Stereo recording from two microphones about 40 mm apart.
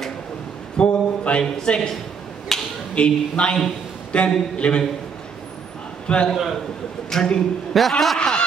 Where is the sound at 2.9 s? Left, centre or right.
Left.